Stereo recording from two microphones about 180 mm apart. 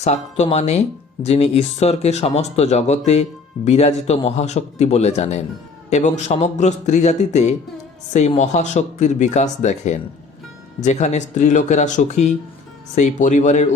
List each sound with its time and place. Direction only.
0.0 s speech: 35° left (ahead or behind)